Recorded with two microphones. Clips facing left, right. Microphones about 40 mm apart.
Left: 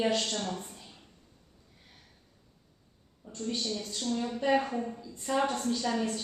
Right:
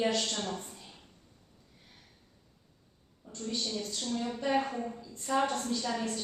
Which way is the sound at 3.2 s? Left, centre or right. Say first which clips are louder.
Left 1 dB; centre.